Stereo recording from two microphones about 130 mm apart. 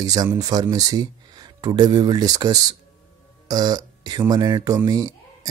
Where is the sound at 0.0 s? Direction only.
30° right (ahead or behind).